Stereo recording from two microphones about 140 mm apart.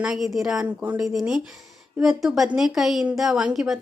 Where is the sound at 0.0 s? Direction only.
5° right (ahead or behind).